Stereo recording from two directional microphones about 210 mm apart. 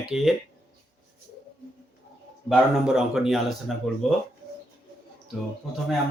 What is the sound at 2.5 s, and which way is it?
Speech, centre (ahead or behind).